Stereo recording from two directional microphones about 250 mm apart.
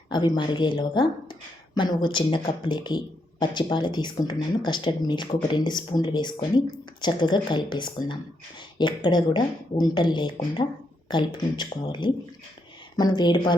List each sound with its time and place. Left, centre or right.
0.1 s speech: centre